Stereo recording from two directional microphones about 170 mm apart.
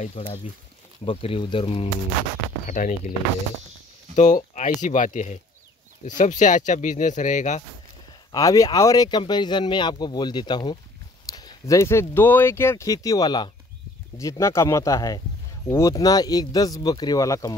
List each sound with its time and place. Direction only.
0.0 s speech: 40° left (ahead or behind)
2.7 s speech: 50° left (ahead or behind)
4.1 s speech: 45° left (ahead or behind)
8.3 s speech: 20° left (ahead or behind)